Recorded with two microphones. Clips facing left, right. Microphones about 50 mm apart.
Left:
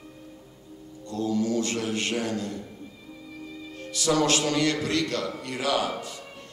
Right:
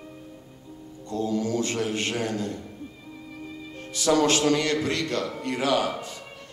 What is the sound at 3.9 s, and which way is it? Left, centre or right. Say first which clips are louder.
A man's voice: right 2 dB; right.